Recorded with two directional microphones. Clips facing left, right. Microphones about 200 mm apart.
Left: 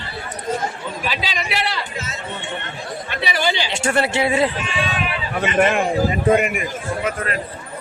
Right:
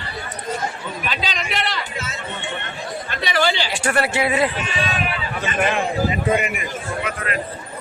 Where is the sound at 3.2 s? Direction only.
15° left (ahead or behind).